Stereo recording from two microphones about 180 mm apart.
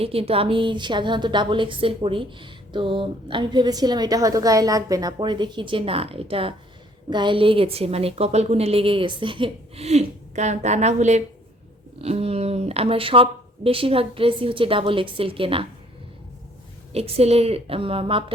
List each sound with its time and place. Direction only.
0.0 s a woman's voice: 30° right (ahead or behind)
16.9 s a woman's voice: 35° right (ahead or behind)